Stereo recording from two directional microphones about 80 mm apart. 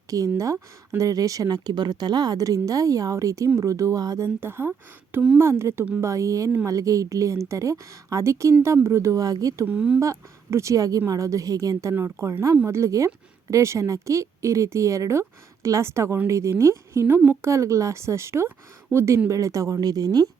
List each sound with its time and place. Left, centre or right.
0.1 s speech: right
4.4 s speech: right
9.6 s speech: centre
10.0 s speech: right
11.9 s speech: right